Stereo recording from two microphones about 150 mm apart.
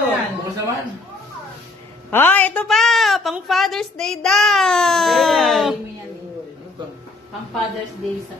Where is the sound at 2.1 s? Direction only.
15° left (ahead or behind).